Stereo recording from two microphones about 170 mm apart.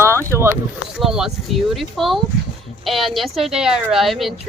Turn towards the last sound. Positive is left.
turn(degrees=0)  # may be behind; listen again after turning